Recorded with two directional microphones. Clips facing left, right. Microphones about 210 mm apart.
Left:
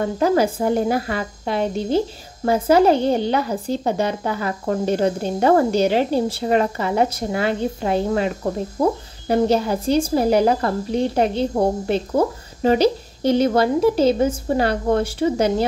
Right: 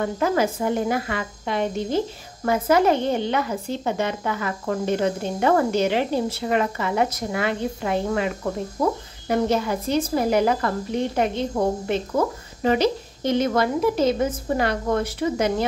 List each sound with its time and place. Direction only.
0.0 s a woman's voice: 35° left (ahead or behind)